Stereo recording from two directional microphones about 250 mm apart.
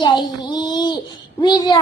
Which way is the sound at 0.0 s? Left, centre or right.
Centre.